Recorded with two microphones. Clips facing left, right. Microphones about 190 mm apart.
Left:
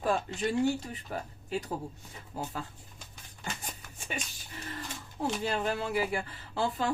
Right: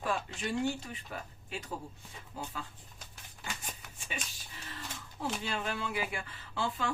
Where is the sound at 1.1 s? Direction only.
40° left (ahead or behind).